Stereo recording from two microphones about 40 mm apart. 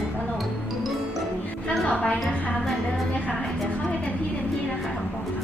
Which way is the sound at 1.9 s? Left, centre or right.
Left.